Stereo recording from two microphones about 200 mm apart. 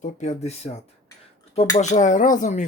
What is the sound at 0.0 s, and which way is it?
Speech, 35° left (ahead or behind).